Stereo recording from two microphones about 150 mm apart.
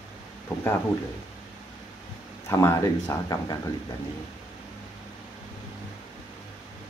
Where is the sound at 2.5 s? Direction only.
20° left (ahead or behind).